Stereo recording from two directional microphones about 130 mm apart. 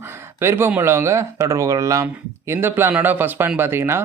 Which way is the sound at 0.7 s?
20° right (ahead or behind).